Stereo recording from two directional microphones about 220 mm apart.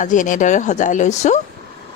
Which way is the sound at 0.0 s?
35° left (ahead or behind).